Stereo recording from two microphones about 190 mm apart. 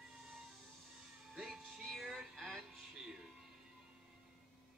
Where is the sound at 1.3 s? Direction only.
Centre (ahead or behind).